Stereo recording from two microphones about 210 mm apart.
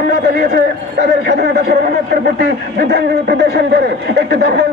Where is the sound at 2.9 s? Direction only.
50° right (ahead or behind).